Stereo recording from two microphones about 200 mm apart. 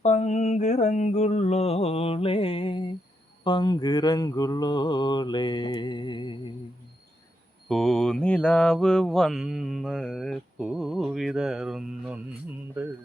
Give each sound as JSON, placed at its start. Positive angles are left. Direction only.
{"t": 0.0, "sound": "mantra", "side_deg": 35}
{"t": 7.7, "sound": "mantra", "side_deg": 0}